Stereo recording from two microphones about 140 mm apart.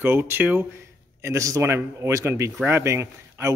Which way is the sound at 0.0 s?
15° right (ahead or behind).